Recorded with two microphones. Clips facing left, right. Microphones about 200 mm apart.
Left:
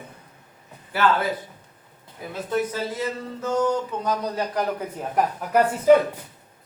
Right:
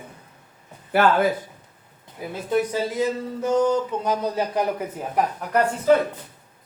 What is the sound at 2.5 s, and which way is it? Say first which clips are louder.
A man's voice: right 3 dB; 15° right (ahead or behind).